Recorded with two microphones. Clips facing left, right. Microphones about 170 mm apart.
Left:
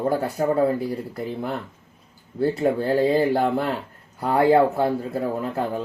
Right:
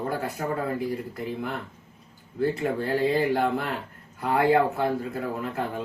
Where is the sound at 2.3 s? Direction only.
30° left (ahead or behind).